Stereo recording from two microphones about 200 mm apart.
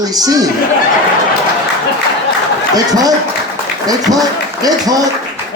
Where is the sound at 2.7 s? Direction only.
20° right (ahead or behind).